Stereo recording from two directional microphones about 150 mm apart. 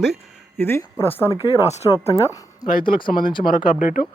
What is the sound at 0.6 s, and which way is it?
Speech, 15° left (ahead or behind).